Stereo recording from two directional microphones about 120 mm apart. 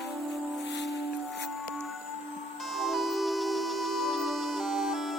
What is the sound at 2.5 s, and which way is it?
Music, centre (ahead or behind).